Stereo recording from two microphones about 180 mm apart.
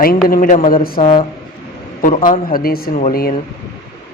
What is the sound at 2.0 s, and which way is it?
A man's voice, 50° left (ahead or behind).